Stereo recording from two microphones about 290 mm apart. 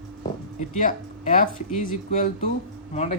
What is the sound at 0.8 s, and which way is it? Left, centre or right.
Speech, left.